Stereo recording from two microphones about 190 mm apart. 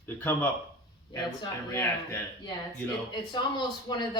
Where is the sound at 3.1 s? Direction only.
25° left (ahead or behind).